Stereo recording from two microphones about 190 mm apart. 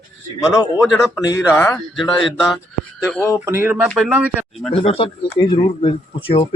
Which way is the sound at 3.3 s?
10° right (ahead or behind).